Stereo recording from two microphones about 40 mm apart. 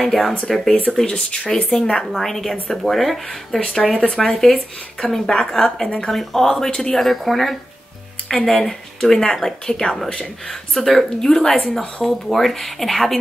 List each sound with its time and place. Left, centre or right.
0.0 s speech: centre
1.0 s speech: left
2.1 s speech: centre
7.0 s speech: centre
9.7 s speech: left
10.5 s speech: centre
11.1 s speech: centre
11.7 s speech: centre